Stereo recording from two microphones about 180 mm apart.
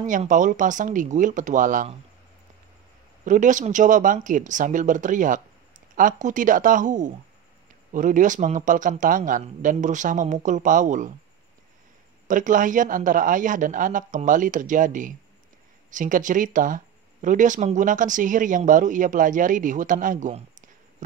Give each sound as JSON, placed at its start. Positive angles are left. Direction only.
{"t": 0.0, "sound": "speech", "side_deg": -45}
{"t": 3.3, "sound": "speech", "side_deg": -45}
{"t": 12.3, "sound": "speech", "side_deg": -45}